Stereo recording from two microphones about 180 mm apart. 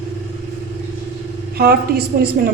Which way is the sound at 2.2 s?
50° right (ahead or behind).